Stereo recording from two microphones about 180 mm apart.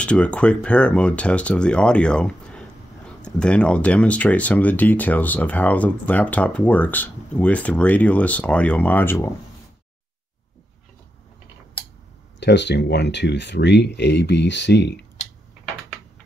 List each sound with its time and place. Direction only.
0.0 s speech: 5° left (ahead or behind)
12.4 s speech: 70° left (ahead or behind)